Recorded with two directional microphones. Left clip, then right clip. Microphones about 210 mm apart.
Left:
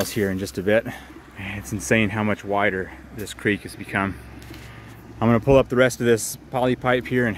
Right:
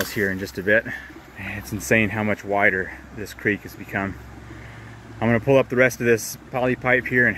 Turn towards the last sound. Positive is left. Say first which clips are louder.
# right 3 dB
turn(degrees=10)  # may be behind; listen again after turning